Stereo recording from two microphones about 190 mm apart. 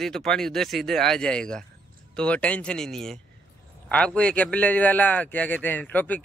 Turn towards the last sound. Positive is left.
turn(degrees=10)  # may be behind; listen again after turning